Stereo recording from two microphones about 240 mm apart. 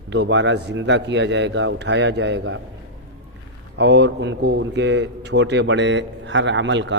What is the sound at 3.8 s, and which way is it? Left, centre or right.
A man's voice, right.